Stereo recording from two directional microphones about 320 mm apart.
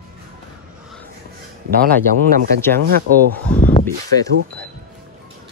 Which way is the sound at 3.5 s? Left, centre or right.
Centre.